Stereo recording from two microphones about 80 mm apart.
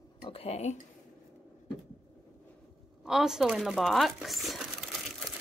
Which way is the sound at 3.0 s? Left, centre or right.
Centre.